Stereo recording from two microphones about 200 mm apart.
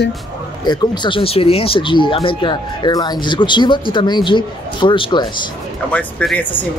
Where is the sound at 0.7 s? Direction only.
25° left (ahead or behind).